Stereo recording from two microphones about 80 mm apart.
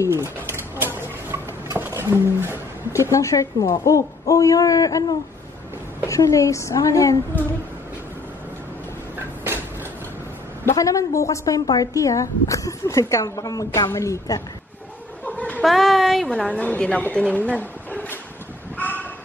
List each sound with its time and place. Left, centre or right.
0.1 s bird: right
2.0 s a sound: right
2.9 s a woman's voice: left
10.6 s a woman's voice: left
13.8 s a woman's voice: left
15.2 s snicker: centre
15.6 s a sound: centre
16.3 s a woman's voice: centre
18.8 s a sound: left